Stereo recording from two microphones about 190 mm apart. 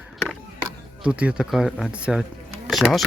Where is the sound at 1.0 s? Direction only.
5° right (ahead or behind).